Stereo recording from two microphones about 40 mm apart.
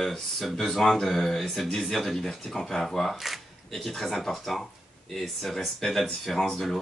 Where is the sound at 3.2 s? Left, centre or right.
Centre.